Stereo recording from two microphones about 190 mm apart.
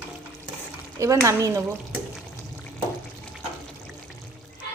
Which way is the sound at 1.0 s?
15° right (ahead or behind).